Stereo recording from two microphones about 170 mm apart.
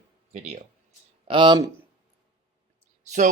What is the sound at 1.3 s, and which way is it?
Speech, 30° right (ahead or behind).